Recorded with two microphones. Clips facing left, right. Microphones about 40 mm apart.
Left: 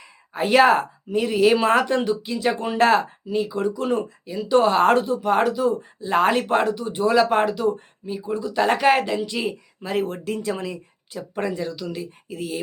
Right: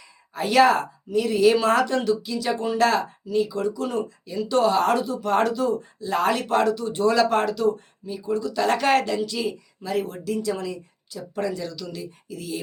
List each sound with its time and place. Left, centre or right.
0.0 s speech: left
4.3 s speech: centre; by 5.2 s left
5.2 s speech: centre